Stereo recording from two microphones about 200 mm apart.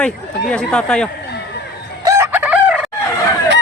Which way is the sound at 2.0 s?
15° right (ahead or behind).